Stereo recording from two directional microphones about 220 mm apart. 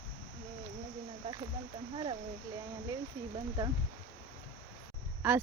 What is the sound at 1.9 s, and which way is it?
Speech, 25° right (ahead or behind).